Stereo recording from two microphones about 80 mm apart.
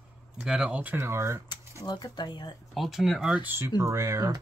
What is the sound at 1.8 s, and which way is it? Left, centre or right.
Speech, left.